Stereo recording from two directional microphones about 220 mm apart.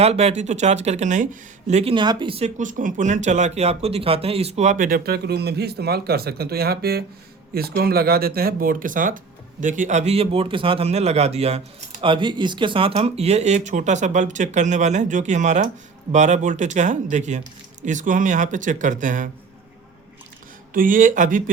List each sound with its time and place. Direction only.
0.0 s speech: 30° right (ahead or behind)
20.7 s speech: 35° right (ahead or behind)